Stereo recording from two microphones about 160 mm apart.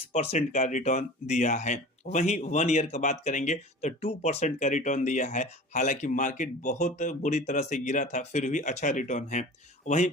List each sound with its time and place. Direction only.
0.1 s speech: 45° left (ahead or behind)